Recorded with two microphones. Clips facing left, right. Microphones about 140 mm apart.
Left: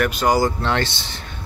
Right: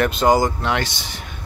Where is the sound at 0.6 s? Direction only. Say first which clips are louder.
Left 1 dB; 10° right (ahead or behind).